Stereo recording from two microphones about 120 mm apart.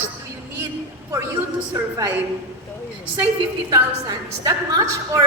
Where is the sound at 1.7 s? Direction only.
25° right (ahead or behind).